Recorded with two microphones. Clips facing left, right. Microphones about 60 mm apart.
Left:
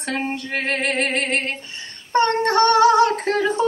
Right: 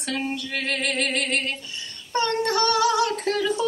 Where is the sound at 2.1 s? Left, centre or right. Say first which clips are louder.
Left 6 dB; left.